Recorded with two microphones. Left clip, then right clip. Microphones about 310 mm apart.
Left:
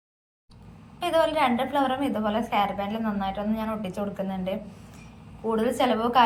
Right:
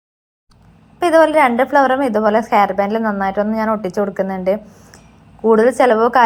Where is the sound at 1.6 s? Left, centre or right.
Right.